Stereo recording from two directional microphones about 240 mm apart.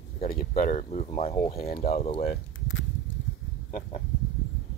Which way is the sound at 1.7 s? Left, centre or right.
Left.